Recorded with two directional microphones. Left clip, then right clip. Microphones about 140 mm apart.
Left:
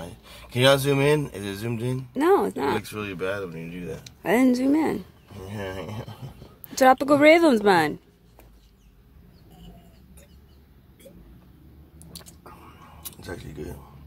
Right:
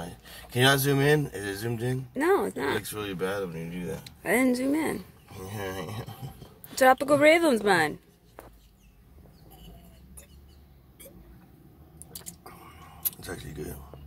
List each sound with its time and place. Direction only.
0.0 s speech: 25° left (ahead or behind)
2.1 s speech: 15° left (ahead or behind)
13.1 s speech: 20° left (ahead or behind)